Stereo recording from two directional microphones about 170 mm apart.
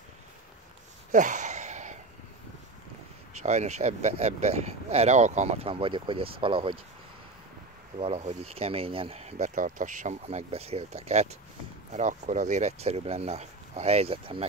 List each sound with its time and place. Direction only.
1.1 s a sound: 45° right (ahead or behind)
3.4 s speech: 40° right (ahead or behind)
8.0 s speech: 40° right (ahead or behind)